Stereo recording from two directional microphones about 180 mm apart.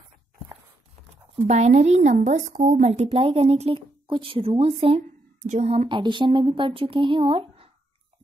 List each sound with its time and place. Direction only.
1.5 s a woman's voice: 40° right (ahead or behind)
5.9 s speech: 25° right (ahead or behind)